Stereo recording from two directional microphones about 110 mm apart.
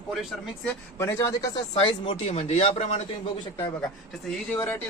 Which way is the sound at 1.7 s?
50° left (ahead or behind).